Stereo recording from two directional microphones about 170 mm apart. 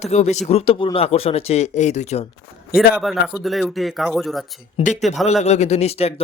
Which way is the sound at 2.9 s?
Centre (ahead or behind).